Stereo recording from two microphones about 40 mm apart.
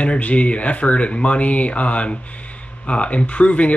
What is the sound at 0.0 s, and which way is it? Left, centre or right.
Speech, left.